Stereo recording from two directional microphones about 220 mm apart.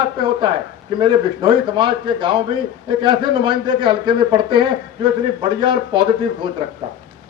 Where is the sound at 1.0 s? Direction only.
20° right (ahead or behind).